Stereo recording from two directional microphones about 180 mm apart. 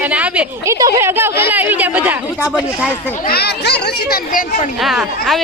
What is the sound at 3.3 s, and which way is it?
Speech, 65° left (ahead or behind).